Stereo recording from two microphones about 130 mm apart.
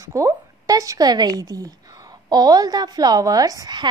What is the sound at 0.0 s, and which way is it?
A woman's voice, 25° right (ahead or behind).